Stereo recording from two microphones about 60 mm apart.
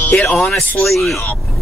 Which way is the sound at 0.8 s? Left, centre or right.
Centre.